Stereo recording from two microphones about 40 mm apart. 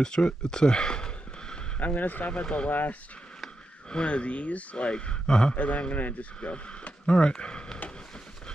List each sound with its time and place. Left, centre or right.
0.0 s speech: centre
1.8 s speech: left
3.9 s speech: left
5.6 s a man's voice: left
6.5 s speech: left